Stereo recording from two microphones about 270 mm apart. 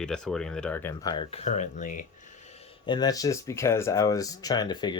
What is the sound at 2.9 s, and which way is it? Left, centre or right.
Speech, centre.